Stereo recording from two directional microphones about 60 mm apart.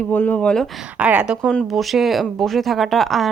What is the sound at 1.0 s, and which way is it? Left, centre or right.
Speech, right.